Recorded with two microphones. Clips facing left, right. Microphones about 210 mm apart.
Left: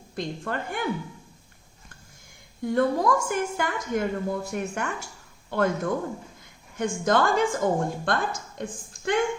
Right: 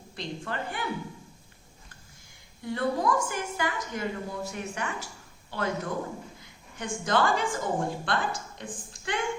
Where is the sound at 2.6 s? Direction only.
50° left (ahead or behind).